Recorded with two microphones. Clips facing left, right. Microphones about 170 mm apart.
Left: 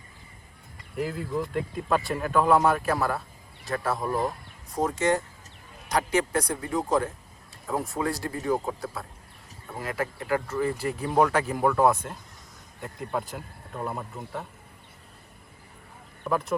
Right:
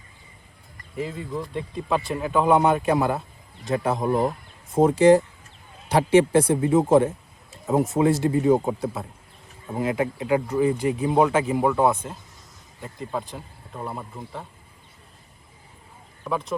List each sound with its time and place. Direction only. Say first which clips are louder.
0.9 s speech: left 1 dB; centre (ahead or behind)
2.5 s speech: right 4 dB; 20° right (ahead or behind)
11.0 s speech: right 2 dB; 5° right (ahead or behind)
16.2 s speech: even; centre (ahead or behind)